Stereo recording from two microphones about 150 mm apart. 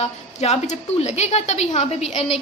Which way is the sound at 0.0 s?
45° left (ahead or behind).